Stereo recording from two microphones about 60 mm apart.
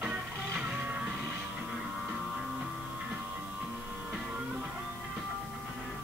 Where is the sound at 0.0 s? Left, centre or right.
Centre.